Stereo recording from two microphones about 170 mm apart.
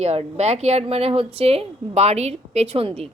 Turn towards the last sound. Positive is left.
turn(degrees=-35)  # may be behind; listen again after turning